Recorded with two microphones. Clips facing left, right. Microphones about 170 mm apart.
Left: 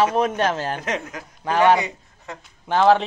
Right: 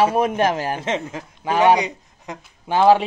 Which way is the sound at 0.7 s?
25° right (ahead or behind).